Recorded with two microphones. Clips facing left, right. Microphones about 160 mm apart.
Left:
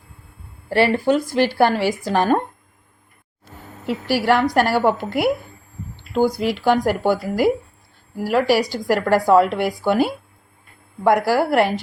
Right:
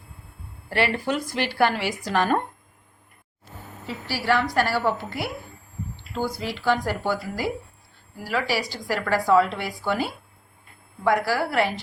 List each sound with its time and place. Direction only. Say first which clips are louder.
0.7 s a woman's voice: left 7 dB; 35° left (ahead or behind)
4.1 s a woman's voice: left 6 dB; 55° left (ahead or behind)
6.7 s a woman's voice: left 6 dB; 55° left (ahead or behind)